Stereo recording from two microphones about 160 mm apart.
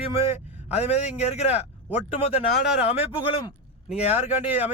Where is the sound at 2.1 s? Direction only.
40° left (ahead or behind).